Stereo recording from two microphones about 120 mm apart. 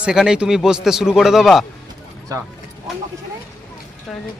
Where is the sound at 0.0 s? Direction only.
5° right (ahead or behind).